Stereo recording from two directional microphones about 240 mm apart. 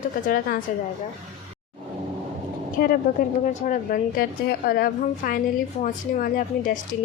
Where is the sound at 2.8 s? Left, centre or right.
Left.